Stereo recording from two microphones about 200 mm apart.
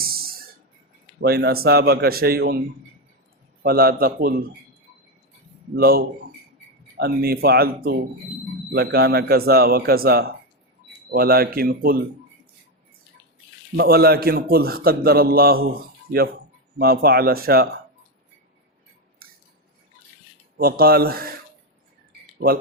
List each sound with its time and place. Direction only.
0.0 s a sound: 50° right (ahead or behind)
1.2 s a man's voice: 50° right (ahead or behind)
3.6 s a man's voice: 50° right (ahead or behind)
5.7 s a man's voice: 50° right (ahead or behind)
13.7 s a man's voice: 50° right (ahead or behind)
16.7 s a man's voice: 50° right (ahead or behind)
19.2 s cutlery: 45° right (ahead or behind)
20.6 s speech: 50° right (ahead or behind)